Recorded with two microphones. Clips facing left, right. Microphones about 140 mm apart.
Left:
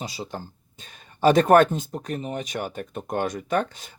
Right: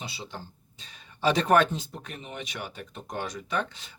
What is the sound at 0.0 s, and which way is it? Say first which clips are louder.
Speech: left 6 dB; 40° left (ahead or behind).